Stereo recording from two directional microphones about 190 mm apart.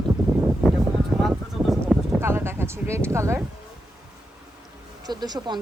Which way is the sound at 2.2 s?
10° right (ahead or behind).